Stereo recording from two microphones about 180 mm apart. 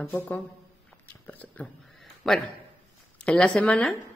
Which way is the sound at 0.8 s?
10° left (ahead or behind).